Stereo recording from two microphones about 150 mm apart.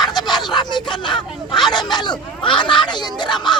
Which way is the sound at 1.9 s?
30° left (ahead or behind).